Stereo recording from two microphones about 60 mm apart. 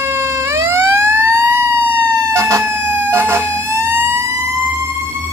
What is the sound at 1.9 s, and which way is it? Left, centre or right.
Emergency vehicle, right.